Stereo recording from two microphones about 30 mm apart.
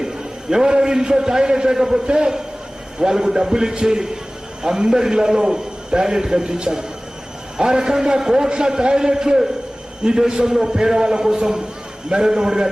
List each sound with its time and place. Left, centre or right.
0.5 s a man's voice: right